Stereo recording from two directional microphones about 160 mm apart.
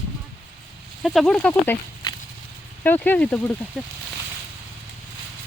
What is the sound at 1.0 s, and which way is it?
Speech, centre (ahead or behind).